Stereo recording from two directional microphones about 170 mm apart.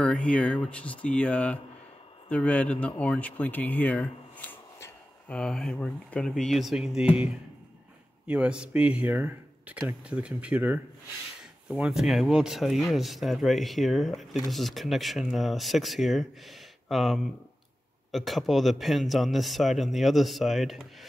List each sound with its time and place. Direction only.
0.0 s a man's voice: 5° left (ahead or behind)
8.3 s a man's voice: 5° right (ahead or behind)